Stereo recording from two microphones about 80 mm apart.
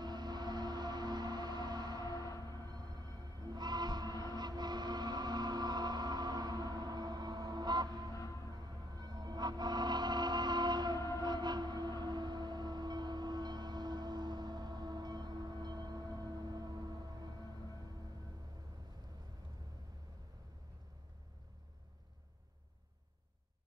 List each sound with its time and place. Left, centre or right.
0.0 s a sound: right
2.1 s a sound: left
3.5 s music: right
8.1 s music: left
8.5 s music: right
11.1 s train: right